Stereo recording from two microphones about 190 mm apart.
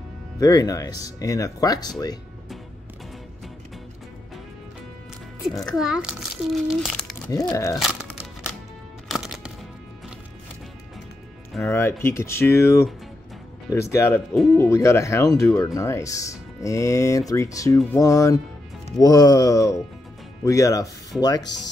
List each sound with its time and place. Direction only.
0.4 s speech: 20° left (ahead or behind)
5.6 s a child's voice: centre (ahead or behind)
7.2 s speech: 20° left (ahead or behind)
7.8 s crumpling: 5° right (ahead or behind)
9.1 s music: centre (ahead or behind)
11.7 s speech: 15° left (ahead or behind)
14.3 s a child's voice: centre (ahead or behind)
14.6 s speech: 15° left (ahead or behind)